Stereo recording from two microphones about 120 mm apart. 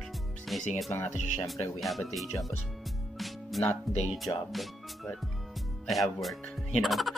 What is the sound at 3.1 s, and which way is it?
Music, centre (ahead or behind).